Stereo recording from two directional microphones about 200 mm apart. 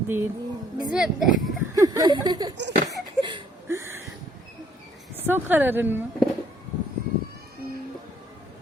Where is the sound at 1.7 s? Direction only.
15° right (ahead or behind).